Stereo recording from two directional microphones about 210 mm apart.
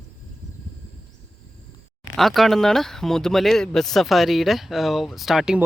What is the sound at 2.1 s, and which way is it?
Speech, centre (ahead or behind).